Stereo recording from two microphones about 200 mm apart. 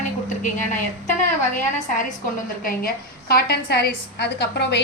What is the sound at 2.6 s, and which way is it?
A woman's voice, 50° left (ahead or behind).